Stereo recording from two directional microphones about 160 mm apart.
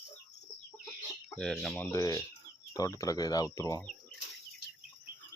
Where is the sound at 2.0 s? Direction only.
25° left (ahead or behind).